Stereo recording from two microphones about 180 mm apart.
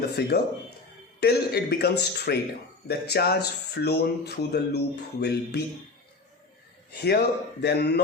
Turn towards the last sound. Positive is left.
turn(degrees=65)  # may be behind; listen again after turning